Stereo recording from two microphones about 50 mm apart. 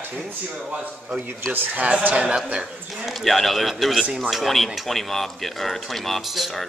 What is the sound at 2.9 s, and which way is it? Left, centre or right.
Speech, centre.